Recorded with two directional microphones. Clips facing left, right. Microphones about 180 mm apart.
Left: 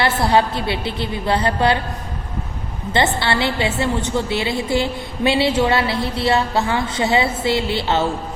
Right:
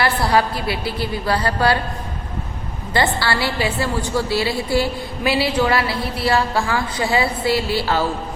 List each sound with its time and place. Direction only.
0.0 s a woman's voice: 25° left (ahead or behind)
2.9 s a woman's voice: 20° left (ahead or behind)